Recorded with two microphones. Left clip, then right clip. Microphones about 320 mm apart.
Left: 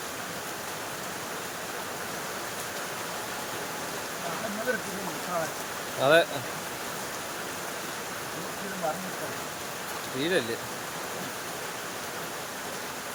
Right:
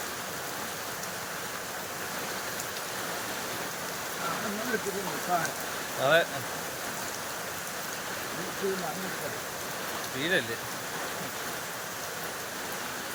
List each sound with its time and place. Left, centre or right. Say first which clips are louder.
6.0 s speech: left 3 dB; centre
10.2 s speech: left 1 dB; centre